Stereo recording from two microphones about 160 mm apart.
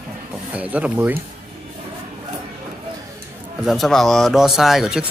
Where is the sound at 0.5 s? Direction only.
10° right (ahead or behind).